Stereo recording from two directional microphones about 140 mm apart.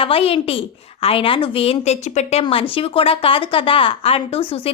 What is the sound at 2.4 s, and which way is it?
A woman's voice, 40° left (ahead or behind).